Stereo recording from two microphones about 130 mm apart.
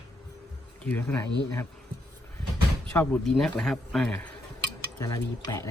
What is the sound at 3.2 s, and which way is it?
Speech, centre (ahead or behind).